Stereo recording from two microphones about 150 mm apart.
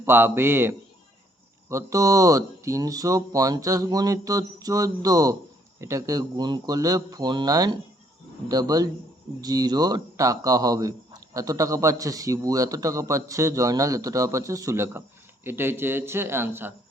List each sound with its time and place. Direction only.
0.0 s a man's voice: 15° right (ahead or behind)